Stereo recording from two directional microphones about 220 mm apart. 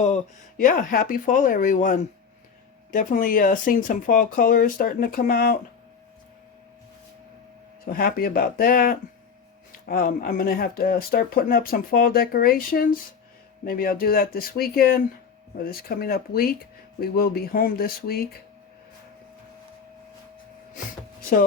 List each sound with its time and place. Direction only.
0.0 s speech: 35° left (ahead or behind)
7.9 s speech: 40° left (ahead or behind)